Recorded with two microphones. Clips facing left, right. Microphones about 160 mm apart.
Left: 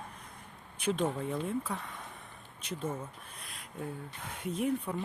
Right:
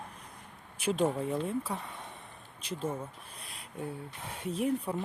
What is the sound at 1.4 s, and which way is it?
Speech, 30° right (ahead or behind).